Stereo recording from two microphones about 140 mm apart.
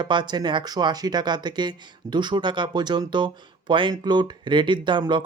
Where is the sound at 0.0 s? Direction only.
35° right (ahead or behind).